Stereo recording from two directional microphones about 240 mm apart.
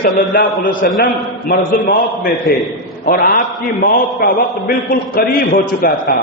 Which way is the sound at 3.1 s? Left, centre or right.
Left.